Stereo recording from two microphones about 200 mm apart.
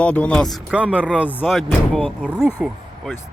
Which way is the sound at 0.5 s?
5° right (ahead or behind).